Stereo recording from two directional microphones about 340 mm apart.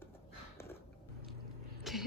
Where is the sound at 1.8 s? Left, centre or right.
Centre.